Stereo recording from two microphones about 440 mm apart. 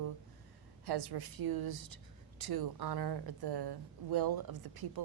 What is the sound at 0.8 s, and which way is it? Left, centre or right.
Speech, right.